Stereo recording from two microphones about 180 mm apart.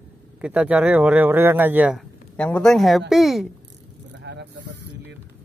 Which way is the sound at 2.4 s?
5° left (ahead or behind).